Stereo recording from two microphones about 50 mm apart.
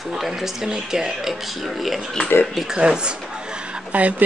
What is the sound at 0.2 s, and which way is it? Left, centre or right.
Speech, centre.